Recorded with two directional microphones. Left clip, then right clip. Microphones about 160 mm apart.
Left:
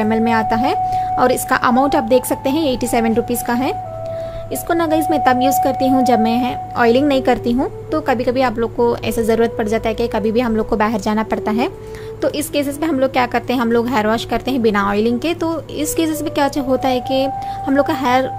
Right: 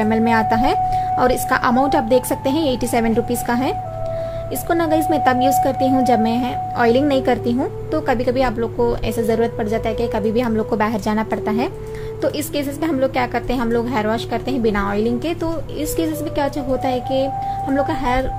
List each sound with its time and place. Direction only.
0.0 s a woman's voice: 20° left (ahead or behind)